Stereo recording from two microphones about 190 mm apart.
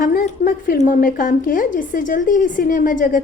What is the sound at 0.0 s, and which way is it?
A woman's voice, 50° left (ahead or behind).